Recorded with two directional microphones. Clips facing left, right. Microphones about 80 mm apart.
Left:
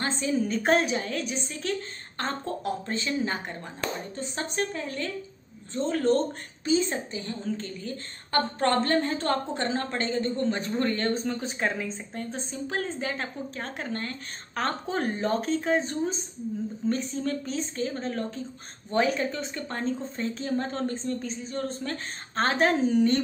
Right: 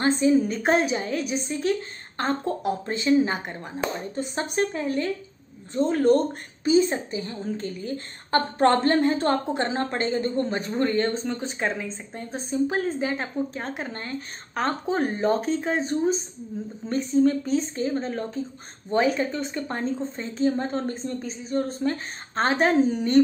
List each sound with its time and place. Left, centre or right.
0.0 s speech: centre